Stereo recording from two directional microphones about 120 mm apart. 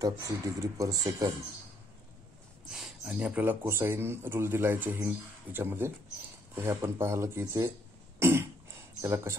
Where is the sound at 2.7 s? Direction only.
5° right (ahead or behind); by 7.7 s 20° right (ahead or behind).